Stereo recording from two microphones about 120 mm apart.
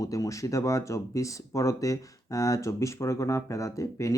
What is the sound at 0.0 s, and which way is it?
Speech, 30° left (ahead or behind).